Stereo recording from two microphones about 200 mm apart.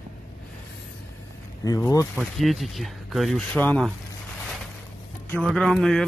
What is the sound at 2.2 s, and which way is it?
Speech, centre (ahead or behind).